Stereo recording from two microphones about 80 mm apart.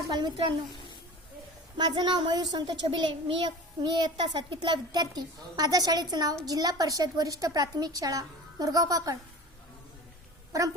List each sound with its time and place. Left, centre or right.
0.1 s a woman's voice: right
1.8 s a child's voice: right
10.5 s a woman's voice: right